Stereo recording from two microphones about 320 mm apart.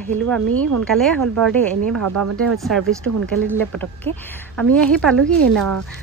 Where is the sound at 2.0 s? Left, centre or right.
Right.